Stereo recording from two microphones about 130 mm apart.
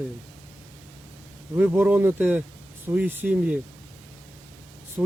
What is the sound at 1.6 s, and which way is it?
Speech, 10° right (ahead or behind).